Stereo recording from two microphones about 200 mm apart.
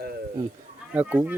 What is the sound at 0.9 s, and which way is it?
Speech, 10° right (ahead or behind).